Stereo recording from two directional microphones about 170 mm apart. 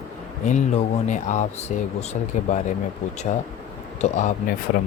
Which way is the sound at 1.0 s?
45° left (ahead or behind).